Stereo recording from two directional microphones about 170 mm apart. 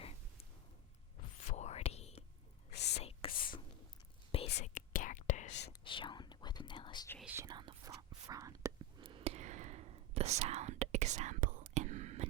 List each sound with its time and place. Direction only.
1.5 s whispering: 40° left (ahead or behind)
2.7 s whispering: 80° left
3.0 s whispering: 35° left (ahead or behind)
4.6 s whispering: 50° left (ahead or behind)
5.8 s whispering: 30° left (ahead or behind)
7.3 s whispering: 15° right (ahead or behind)
9.0 s whispering: 35° right (ahead or behind)